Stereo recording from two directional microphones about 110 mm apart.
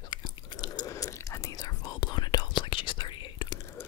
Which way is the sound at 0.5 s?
35° left (ahead or behind).